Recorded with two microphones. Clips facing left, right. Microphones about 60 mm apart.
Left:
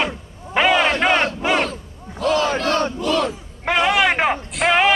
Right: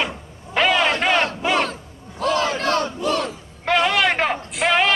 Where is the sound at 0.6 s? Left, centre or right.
Centre.